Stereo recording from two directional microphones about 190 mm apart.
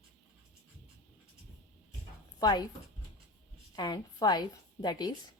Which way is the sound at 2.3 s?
20° left (ahead or behind).